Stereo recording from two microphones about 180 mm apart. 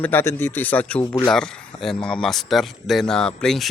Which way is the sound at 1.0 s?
20° left (ahead or behind).